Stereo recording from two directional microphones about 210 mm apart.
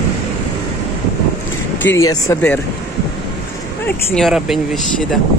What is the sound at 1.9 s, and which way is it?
Speech, 15° left (ahead or behind).